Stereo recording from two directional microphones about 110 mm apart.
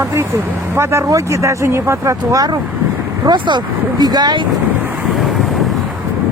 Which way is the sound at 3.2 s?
45° right (ahead or behind).